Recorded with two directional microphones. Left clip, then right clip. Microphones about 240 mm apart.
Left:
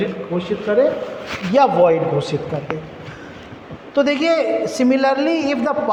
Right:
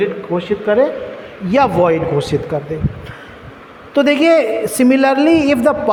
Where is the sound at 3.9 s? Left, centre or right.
Right.